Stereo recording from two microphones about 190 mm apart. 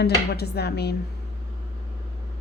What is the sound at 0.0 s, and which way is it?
Speech, 60° left (ahead or behind).